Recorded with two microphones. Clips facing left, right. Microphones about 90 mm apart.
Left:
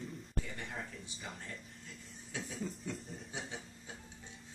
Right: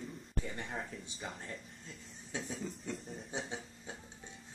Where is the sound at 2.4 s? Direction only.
Centre (ahead or behind).